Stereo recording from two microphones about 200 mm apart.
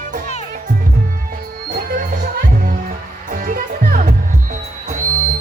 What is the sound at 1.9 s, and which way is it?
Music, 45° right (ahead or behind).